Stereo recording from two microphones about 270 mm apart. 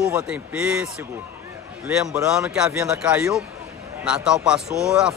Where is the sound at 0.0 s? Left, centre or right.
Centre.